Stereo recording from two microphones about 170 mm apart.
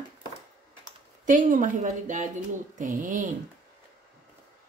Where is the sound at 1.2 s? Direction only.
50° right (ahead or behind).